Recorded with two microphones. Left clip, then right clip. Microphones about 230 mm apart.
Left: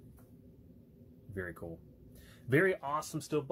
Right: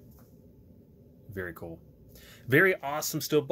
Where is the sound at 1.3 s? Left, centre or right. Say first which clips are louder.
Right 4 dB; centre.